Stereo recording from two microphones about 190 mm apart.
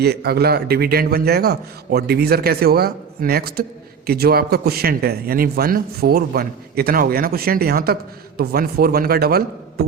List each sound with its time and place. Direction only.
0.0 s a man's voice: 55° right (ahead or behind)